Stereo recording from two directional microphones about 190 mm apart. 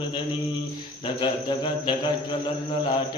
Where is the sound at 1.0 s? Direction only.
25° left (ahead or behind).